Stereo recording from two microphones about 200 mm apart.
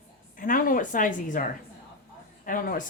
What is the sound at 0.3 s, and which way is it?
A woman's voice, 45° left (ahead or behind).